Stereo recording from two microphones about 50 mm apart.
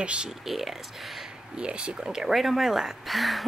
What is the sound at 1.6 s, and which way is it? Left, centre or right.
Speech, right.